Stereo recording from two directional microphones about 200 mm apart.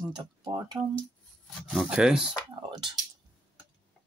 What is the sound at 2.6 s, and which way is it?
Speech, 25° right (ahead or behind).